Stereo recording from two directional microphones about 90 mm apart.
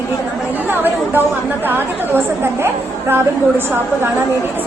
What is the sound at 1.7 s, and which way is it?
Speech, 25° right (ahead or behind).